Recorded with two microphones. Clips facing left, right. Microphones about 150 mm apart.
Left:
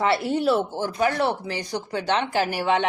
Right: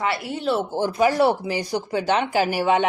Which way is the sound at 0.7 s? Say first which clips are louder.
Right 4 dB; 10° right (ahead or behind).